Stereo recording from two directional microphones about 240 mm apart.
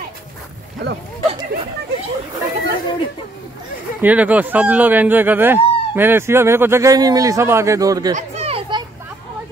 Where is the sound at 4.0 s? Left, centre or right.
Centre.